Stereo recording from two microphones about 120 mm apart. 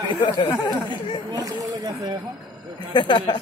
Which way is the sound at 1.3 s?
30° right (ahead or behind).